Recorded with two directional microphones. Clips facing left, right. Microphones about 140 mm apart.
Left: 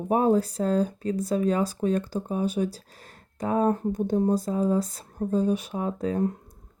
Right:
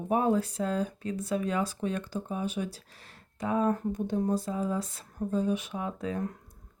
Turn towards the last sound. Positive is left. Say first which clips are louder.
# left 7 dB
turn(degrees=35)  # may be behind; listen again after turning